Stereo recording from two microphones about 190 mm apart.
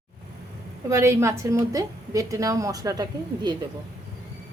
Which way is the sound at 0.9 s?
15° right (ahead or behind).